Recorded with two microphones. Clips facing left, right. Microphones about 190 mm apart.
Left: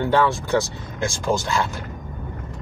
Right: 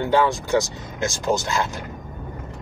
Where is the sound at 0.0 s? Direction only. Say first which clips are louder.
Even; 15° right (ahead or behind).